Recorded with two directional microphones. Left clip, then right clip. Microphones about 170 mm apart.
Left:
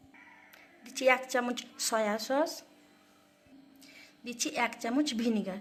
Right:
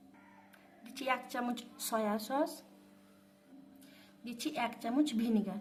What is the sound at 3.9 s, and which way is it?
A woman's voice, 15° left (ahead or behind).